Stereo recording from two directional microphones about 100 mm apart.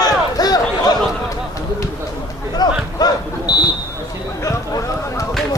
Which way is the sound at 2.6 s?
45° left (ahead or behind).